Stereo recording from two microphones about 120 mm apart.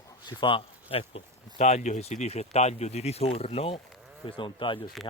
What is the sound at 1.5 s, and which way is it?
Speech, 65° left (ahead or behind).